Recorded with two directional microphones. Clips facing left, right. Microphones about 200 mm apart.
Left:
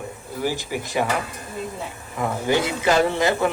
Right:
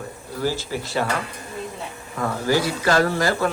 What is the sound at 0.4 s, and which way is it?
Speech, 15° left (ahead or behind).